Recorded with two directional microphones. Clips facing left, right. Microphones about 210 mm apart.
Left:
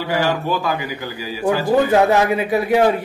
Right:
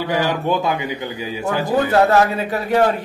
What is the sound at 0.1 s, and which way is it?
Speech, 20° right (ahead or behind).